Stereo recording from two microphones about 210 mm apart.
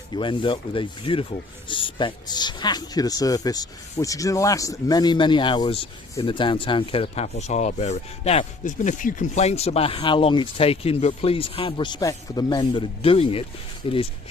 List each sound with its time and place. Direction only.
0.1 s speech: 25° left (ahead or behind)